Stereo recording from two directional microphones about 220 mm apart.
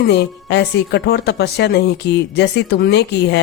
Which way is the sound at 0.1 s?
50° left (ahead or behind).